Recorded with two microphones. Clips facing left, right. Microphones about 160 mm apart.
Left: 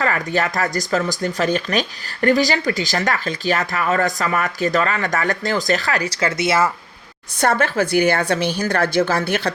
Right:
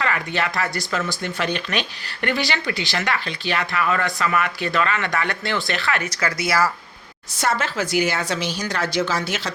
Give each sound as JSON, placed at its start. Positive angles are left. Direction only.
{"t": 0.0, "sound": "speech", "side_deg": 40}
{"t": 7.3, "sound": "a woman's voice", "side_deg": 55}